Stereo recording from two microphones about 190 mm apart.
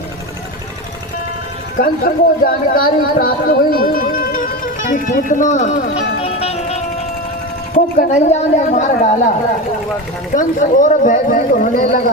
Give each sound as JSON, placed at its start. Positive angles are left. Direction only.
{"t": 1.8, "sound": "speech", "side_deg": 50}
{"t": 6.1, "sound": "music", "side_deg": 35}
{"t": 7.9, "sound": "a woman's voice", "side_deg": 40}
{"t": 10.3, "sound": "speech", "side_deg": 45}